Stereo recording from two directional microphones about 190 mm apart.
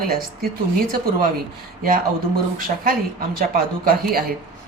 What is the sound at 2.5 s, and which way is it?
A woman's voice, 50° right (ahead or behind).